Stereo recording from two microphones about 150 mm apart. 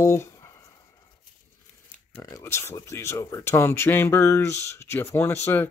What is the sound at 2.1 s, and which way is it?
Speech, 20° left (ahead or behind).